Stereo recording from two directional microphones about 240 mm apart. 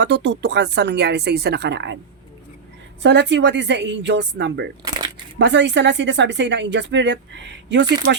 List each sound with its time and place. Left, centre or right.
0.0 s speech: right
3.0 s speech: right